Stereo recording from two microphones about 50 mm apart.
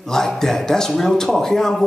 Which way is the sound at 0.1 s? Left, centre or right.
Centre.